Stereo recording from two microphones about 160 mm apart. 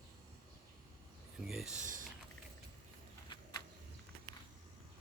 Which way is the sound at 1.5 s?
5° right (ahead or behind).